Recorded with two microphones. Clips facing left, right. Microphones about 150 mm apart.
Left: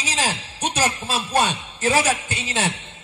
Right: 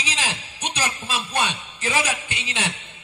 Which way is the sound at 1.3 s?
35° left (ahead or behind).